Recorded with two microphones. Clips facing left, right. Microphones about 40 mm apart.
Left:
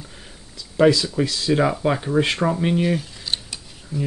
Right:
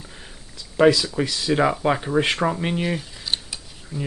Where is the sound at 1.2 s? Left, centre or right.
Right.